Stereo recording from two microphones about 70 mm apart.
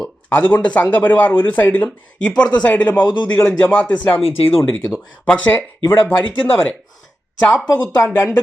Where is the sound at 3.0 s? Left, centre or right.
Left.